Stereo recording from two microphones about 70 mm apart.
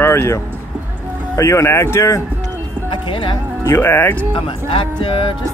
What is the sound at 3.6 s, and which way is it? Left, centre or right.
Speech, left.